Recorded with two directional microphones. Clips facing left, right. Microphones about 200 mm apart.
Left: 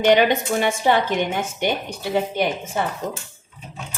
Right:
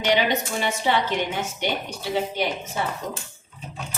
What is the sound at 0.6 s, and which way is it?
A woman's voice, 50° left (ahead or behind).